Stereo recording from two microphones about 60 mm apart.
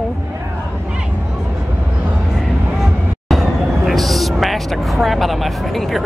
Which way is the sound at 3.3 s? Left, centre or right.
Centre.